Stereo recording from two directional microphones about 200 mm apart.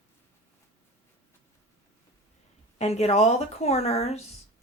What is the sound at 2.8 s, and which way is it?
Speech, 30° left (ahead or behind).